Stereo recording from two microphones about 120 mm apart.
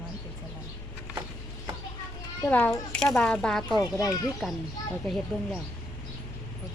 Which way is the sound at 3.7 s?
35° left (ahead or behind).